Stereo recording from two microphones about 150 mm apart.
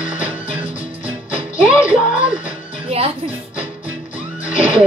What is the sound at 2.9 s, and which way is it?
Speech, 40° right (ahead or behind).